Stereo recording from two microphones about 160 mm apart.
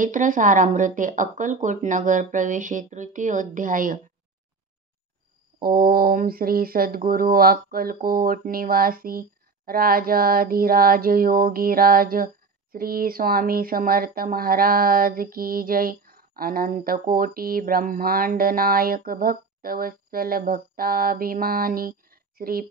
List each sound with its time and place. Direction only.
0.0 s speech: 55° right (ahead or behind)
5.6 s speech: 70° right (ahead or behind)